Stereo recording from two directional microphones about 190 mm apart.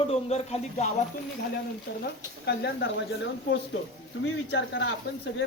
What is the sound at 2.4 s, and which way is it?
Speech, 60° left (ahead or behind).